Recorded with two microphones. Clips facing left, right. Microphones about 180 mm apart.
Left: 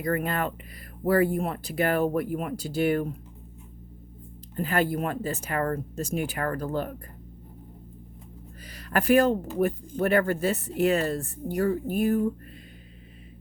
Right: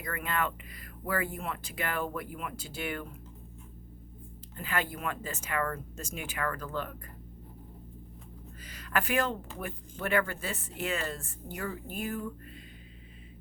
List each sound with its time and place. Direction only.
0.0 s speech: 40° left (ahead or behind)
4.5 s speech: 40° left (ahead or behind)
8.7 s speech: 40° left (ahead or behind)